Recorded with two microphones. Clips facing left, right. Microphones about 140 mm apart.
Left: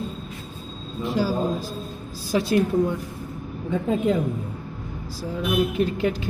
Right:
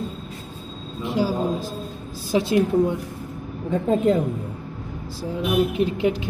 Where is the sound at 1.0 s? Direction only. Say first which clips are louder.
Right 1 dB; 20° right (ahead or behind).